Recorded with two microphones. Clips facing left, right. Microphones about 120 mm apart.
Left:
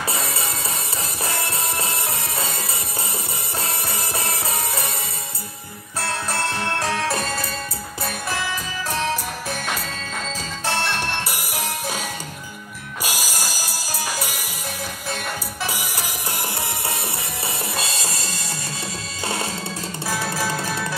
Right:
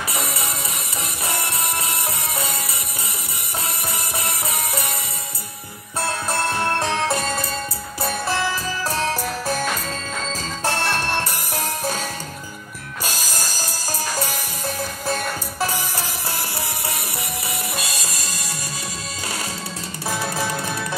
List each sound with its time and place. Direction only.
0.1 s music: 25° left (ahead or behind)
4.2 s music: 30° left (ahead or behind)
6.8 s music: 20° right (ahead or behind)
9.0 s music: 35° right (ahead or behind)
10.6 s music: 40° right (ahead or behind)
11.2 s music: 10° left (ahead or behind)
13.0 s music: 10° left (ahead or behind)
17.7 s music: 30° left (ahead or behind)
20.1 s music: 25° right (ahead or behind)